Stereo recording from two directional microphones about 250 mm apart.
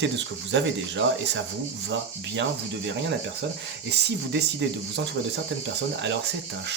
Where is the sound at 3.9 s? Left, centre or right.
Right.